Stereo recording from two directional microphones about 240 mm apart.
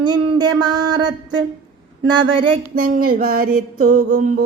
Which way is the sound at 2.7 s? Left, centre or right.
Right.